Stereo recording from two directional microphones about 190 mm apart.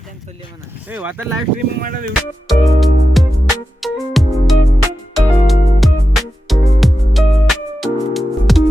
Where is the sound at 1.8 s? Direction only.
50° right (ahead or behind).